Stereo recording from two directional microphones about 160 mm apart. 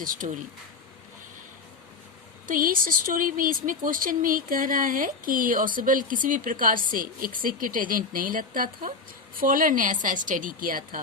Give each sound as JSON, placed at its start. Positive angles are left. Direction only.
{"t": 0.0, "sound": "speech", "side_deg": -55}
{"t": 2.5, "sound": "speech", "side_deg": -60}